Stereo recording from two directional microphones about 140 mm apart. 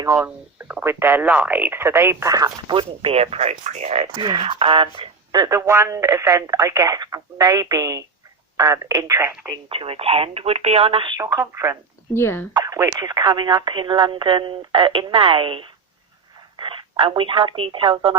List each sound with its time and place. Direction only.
0.2 s speech: 10° right (ahead or behind)
9.5 s speech: 40° right (ahead or behind)
11.2 s speech: 20° right (ahead or behind)
12.1 s speech: 15° left (ahead or behind)
12.5 s speech: 25° right (ahead or behind)